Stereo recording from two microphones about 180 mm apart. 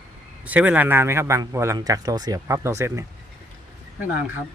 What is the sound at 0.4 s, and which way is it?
A man's voice, 10° right (ahead or behind).